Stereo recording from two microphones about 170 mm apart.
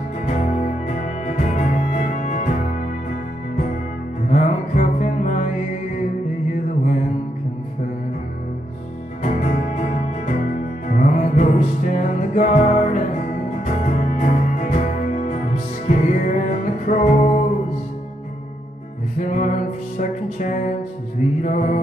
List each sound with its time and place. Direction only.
0.8 s music: 50° left (ahead or behind)
4.3 s music: 50° left (ahead or behind)
9.2 s music: 45° left (ahead or behind)
19.1 s music: 45° left (ahead or behind)
21.4 s mantra: 45° left (ahead or behind)